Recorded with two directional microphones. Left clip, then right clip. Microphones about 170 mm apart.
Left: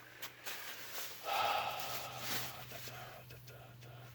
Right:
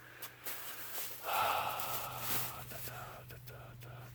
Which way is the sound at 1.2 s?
10° right (ahead or behind).